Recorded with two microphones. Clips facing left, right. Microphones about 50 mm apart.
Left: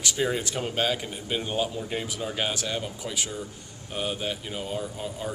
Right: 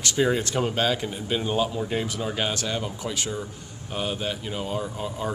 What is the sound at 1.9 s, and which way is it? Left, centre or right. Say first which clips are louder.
A man's voice: right 3 dB; centre.